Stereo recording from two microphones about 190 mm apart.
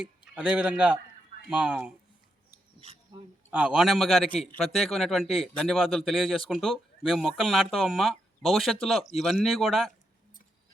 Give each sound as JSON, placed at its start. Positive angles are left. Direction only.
{"t": 0.0, "sound": "a man's voice", "side_deg": -5}
{"t": 3.5, "sound": "a man's voice", "side_deg": -5}